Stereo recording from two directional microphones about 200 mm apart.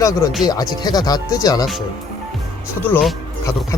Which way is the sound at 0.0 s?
15° left (ahead or behind).